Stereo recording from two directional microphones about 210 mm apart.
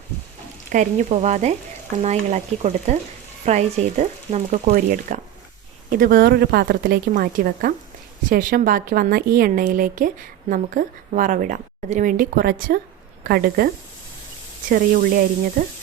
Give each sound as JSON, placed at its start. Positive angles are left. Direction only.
{"t": 0.7, "sound": "a woman's voice", "side_deg": -35}
{"t": 14.7, "sound": "speech", "side_deg": -40}